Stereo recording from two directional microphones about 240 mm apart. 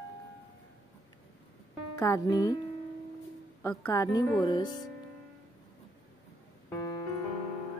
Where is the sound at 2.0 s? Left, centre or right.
Centre.